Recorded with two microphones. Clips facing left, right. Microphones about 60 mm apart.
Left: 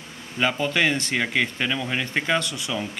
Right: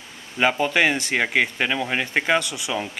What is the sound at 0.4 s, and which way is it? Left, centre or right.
Speech, centre.